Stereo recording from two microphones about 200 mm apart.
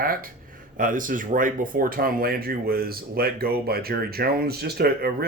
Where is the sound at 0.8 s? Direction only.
40° right (ahead or behind).